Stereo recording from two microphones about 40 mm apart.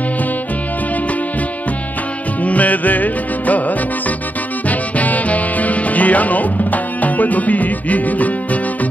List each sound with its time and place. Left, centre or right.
2.4 s music: left